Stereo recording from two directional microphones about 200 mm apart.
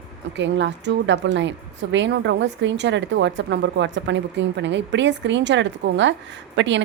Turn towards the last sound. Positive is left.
turn(degrees=-65)  # may be behind; listen again after turning